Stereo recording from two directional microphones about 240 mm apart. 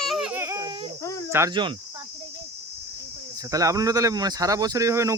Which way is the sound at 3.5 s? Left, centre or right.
Centre.